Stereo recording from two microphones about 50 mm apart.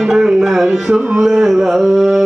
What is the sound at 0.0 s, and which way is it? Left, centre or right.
Music, centre.